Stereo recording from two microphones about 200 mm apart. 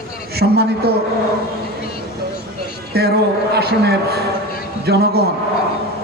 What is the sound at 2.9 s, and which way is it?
A man's voice, 50° right (ahead or behind).